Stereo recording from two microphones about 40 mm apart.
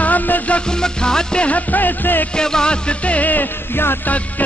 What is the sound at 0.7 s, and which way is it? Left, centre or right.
Music, centre.